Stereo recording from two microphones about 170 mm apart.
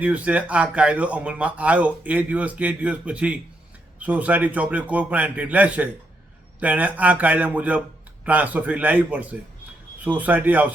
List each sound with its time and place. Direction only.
0.0 s speech: 10° right (ahead or behind)